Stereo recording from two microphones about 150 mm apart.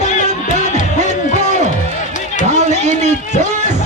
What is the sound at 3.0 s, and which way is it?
Music, 50° right (ahead or behind).